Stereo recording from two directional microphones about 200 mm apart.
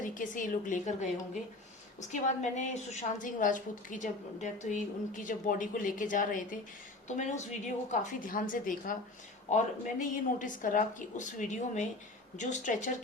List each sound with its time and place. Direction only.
0.0 s a woman's voice: 40° left (ahead or behind)